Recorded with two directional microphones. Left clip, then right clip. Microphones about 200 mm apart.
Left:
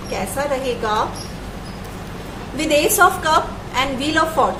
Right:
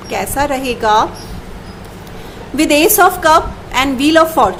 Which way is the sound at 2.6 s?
55° right (ahead or behind).